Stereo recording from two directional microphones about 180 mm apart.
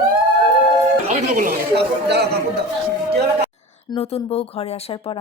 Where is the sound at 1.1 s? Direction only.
45° right (ahead or behind).